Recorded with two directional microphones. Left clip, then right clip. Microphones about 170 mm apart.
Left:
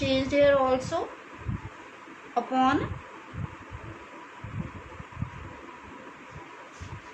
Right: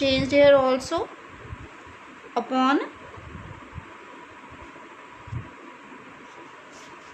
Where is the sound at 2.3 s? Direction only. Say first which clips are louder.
Right 2 dB; 55° right (ahead or behind).